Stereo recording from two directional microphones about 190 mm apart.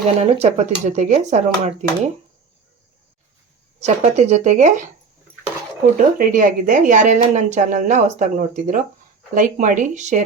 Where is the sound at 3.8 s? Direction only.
35° right (ahead or behind).